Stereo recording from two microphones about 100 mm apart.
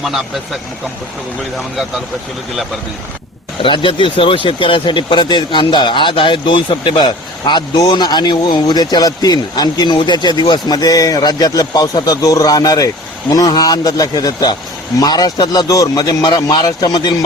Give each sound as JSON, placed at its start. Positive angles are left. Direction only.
{"t": 3.6, "sound": "a man's voice", "side_deg": 55}